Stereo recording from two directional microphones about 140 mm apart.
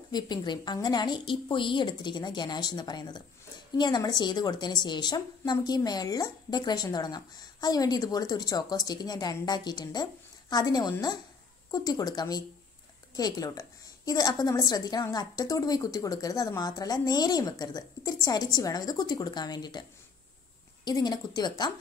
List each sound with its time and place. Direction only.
0.1 s a woman's voice: 30° left (ahead or behind)
20.8 s a woman's voice: 30° left (ahead or behind)